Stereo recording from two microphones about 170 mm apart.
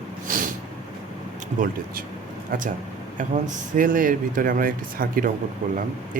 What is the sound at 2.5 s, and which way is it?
Speech, 50° right (ahead or behind).